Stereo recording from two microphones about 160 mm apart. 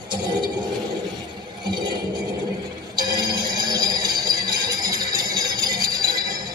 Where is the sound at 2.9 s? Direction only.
25° right (ahead or behind).